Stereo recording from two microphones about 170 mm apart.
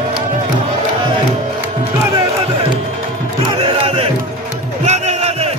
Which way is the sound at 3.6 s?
35° right (ahead or behind).